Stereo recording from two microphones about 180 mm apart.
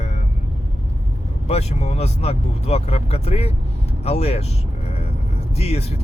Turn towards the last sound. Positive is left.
turn(degrees=35)  # may be behind; listen again after turning